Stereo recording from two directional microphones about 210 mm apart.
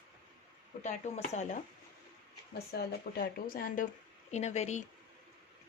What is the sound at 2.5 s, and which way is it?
Speech, 50° left (ahead or behind).